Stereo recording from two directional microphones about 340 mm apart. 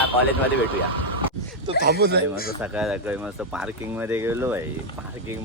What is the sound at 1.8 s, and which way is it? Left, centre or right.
Speech, right.